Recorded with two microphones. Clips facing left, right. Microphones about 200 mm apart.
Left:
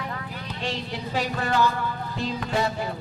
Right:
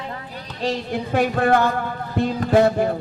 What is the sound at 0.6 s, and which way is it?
A man's voice, 45° right (ahead or behind).